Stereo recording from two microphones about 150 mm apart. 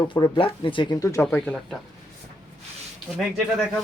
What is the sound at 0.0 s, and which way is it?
Speech, 35° left (ahead or behind).